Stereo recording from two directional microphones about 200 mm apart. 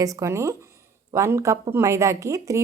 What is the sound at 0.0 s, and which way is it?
Speech, 15° right (ahead or behind).